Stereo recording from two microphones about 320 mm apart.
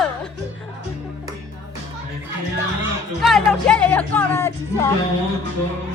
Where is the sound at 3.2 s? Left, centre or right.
Centre.